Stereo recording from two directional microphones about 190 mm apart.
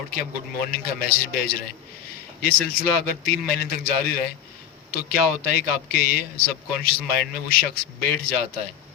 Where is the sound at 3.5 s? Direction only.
50° left (ahead or behind).